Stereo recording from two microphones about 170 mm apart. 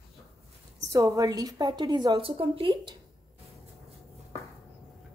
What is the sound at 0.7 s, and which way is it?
A woman's voice, 20° right (ahead or behind).